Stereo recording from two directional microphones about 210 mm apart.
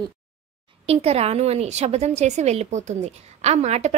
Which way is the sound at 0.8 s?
30° right (ahead or behind).